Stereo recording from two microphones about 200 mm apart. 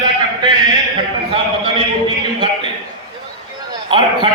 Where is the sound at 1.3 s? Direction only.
25° right (ahead or behind).